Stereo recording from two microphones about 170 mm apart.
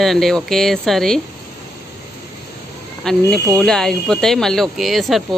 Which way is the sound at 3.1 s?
5° left (ahead or behind).